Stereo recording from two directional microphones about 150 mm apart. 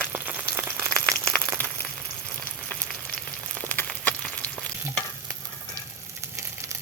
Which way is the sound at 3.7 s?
10° left (ahead or behind).